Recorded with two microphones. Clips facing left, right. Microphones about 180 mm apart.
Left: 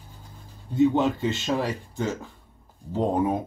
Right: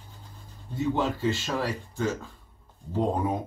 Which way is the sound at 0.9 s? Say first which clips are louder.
Left 3 dB; 20° left (ahead or behind).